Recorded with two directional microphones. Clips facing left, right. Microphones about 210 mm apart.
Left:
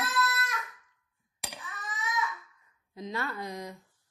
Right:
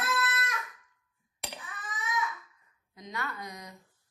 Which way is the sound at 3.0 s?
25° left (ahead or behind).